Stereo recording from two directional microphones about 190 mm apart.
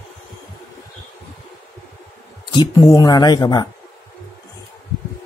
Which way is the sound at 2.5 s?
20° left (ahead or behind).